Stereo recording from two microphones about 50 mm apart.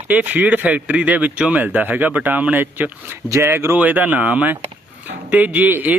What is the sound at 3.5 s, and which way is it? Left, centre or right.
Speech, right.